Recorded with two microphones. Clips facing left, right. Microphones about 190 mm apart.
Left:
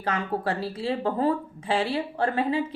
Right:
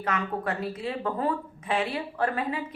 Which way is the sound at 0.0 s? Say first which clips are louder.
Left 2 dB; 30° left (ahead or behind).